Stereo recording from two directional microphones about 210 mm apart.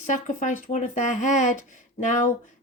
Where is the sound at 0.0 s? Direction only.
35° left (ahead or behind).